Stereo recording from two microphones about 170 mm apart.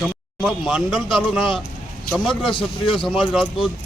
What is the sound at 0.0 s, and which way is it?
Speech, centre (ahead or behind).